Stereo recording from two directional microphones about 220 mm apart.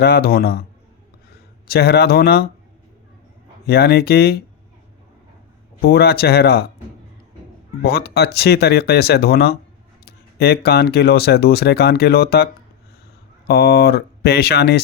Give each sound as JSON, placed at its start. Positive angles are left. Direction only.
{"t": 0.0, "sound": "speech", "side_deg": 45}
{"t": 1.6, "sound": "speech", "side_deg": 45}
{"t": 3.7, "sound": "speech", "side_deg": 45}
{"t": 5.8, "sound": "speech", "side_deg": 45}
{"t": 7.8, "sound": "speech", "side_deg": 45}
{"t": 13.5, "sound": "speech", "side_deg": 45}